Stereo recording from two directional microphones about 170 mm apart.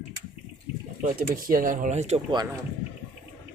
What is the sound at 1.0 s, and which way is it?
Speech, 50° right (ahead or behind).